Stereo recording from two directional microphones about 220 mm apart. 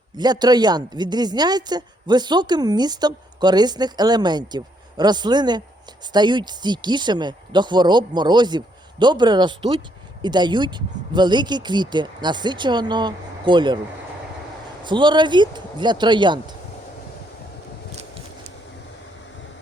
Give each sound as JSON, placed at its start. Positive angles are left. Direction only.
{"t": 0.2, "sound": "a woman's voice", "side_deg": -20}
{"t": 14.8, "sound": "a woman's voice", "side_deg": -20}